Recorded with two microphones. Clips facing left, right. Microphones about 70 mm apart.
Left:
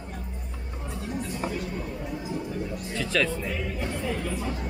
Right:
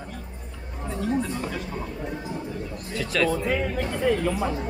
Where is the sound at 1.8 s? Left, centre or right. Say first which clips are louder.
Right 1 dB; right.